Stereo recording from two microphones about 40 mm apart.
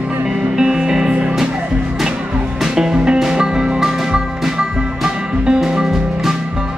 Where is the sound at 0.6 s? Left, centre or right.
Centre.